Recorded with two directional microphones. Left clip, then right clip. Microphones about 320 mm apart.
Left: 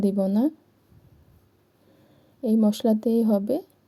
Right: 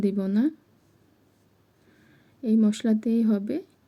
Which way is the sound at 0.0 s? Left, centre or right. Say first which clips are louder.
Left 3 dB; left.